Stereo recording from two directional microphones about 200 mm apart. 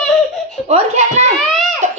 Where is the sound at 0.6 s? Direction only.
35° right (ahead or behind).